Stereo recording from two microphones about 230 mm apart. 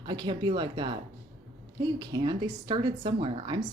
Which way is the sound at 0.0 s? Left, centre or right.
Centre.